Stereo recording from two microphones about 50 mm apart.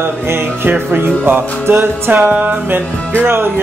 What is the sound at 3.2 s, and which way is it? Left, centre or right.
Music, right.